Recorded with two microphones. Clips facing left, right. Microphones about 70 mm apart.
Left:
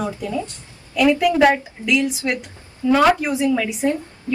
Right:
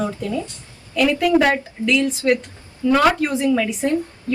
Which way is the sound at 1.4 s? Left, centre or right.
Centre.